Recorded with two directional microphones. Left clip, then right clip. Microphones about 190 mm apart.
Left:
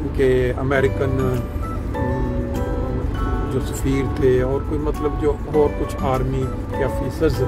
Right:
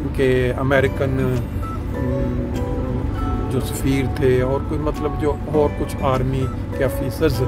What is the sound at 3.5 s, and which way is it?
Speech, 15° right (ahead or behind).